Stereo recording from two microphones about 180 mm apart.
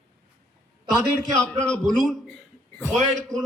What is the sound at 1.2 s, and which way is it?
Speech, 15° right (ahead or behind).